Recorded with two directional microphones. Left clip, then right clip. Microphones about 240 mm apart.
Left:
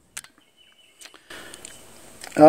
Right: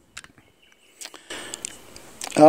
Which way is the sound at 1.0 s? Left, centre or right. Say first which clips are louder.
Right 5 dB; right.